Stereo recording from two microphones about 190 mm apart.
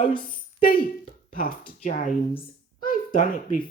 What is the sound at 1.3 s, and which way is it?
A child's voice, 45° left (ahead or behind).